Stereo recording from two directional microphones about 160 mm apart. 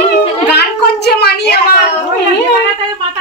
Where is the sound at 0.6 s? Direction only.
90° left.